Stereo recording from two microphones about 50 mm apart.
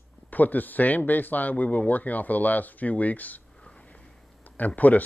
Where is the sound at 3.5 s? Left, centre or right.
Centre.